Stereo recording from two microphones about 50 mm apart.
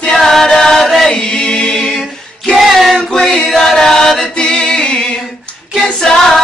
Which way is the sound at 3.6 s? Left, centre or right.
Centre.